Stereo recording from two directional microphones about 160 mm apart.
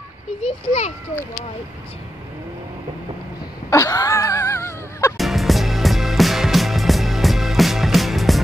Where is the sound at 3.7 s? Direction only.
20° left (ahead or behind).